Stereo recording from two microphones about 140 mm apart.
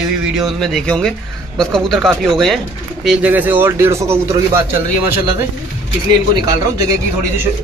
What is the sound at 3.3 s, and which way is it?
Speech, 15° right (ahead or behind).